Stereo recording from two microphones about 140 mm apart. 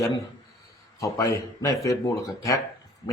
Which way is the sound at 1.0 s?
25° left (ahead or behind).